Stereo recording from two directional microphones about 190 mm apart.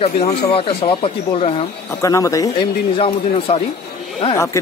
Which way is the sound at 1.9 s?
15° left (ahead or behind).